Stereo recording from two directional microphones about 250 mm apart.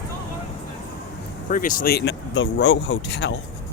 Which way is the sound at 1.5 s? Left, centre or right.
Left.